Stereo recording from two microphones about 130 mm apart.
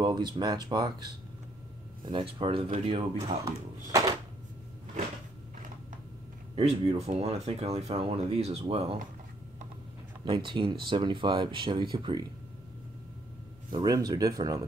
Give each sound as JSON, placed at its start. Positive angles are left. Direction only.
{"t": 0.0, "sound": "speech", "side_deg": -35}
{"t": 2.0, "sound": "speech", "side_deg": -45}
{"t": 3.9, "sound": "a sound", "side_deg": -30}
{"t": 6.5, "sound": "speech", "side_deg": -50}
{"t": 10.2, "sound": "speech", "side_deg": -35}
{"t": 13.7, "sound": "speech", "side_deg": -30}